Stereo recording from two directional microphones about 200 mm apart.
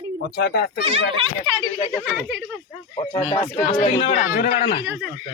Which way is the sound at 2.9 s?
30° left (ahead or behind).